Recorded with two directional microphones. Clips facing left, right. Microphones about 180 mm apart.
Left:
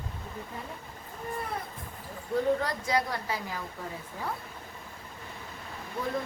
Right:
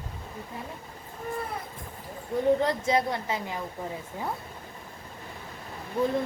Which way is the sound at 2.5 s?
25° right (ahead or behind).